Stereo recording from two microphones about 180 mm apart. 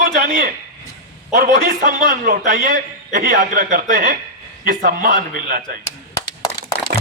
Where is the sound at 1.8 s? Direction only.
50° right (ahead or behind).